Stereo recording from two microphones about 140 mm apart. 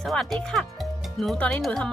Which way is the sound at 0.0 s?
Centre (ahead or behind).